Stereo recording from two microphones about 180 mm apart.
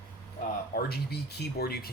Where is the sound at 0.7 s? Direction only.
60° left (ahead or behind).